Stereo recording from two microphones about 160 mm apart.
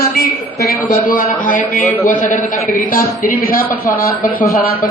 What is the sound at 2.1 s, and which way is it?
A man's voice, 55° left (ahead or behind).